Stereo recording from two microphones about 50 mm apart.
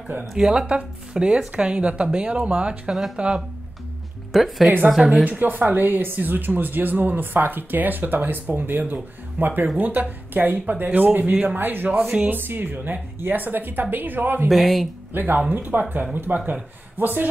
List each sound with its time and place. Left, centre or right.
0.3 s speech: centre
4.3 s speech: centre
5.4 s speech: right
14.5 s speech: centre
15.1 s speech: right